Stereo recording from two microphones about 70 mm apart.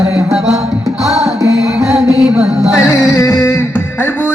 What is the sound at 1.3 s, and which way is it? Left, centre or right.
Music, right.